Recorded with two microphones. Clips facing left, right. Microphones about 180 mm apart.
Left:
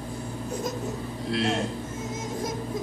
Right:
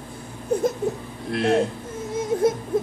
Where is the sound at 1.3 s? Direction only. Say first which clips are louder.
Right 6 dB; 60° right (ahead or behind).